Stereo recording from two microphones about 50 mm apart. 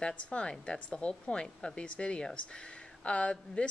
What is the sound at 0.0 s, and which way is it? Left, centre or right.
Speech, left.